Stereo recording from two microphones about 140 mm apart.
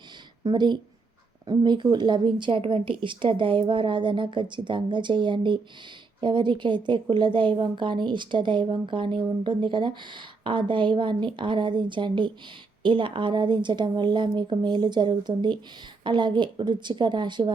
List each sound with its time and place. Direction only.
0.4 s speech: 30° right (ahead or behind)